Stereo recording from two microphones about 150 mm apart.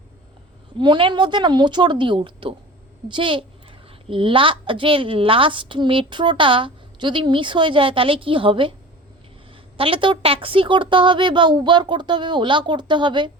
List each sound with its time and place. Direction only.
0.8 s a child's voice: 35° right (ahead or behind)
9.7 s a child's voice: 35° right (ahead or behind)